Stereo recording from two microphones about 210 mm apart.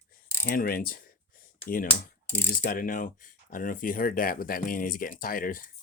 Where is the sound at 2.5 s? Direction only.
40° left (ahead or behind).